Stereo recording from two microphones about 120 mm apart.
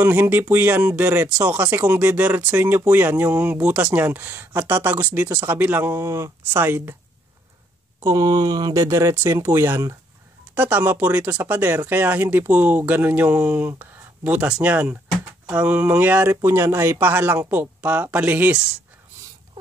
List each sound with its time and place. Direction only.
0.0 s speech: 15° right (ahead or behind)
8.0 s speech: 35° right (ahead or behind); by 18.6 s 15° right (ahead or behind)